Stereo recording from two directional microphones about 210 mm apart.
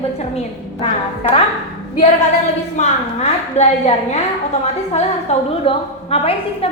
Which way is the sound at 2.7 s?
35° left (ahead or behind).